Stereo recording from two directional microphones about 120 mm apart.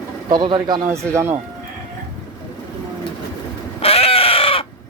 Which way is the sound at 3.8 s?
55° left (ahead or behind).